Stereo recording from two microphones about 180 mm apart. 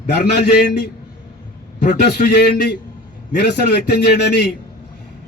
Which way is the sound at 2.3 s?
65° left (ahead or behind).